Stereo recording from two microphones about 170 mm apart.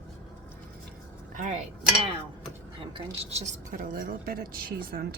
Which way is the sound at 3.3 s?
40° right (ahead or behind).